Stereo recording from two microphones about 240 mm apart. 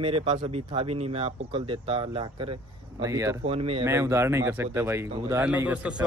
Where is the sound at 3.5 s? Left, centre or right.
Right.